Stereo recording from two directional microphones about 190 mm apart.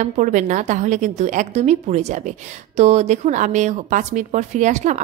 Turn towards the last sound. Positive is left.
turn(degrees=-40)  # may be behind; listen again after turning